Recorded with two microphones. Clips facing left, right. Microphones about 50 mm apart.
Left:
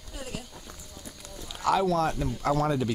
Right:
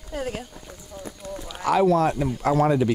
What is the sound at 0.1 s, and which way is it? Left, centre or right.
Speech, right.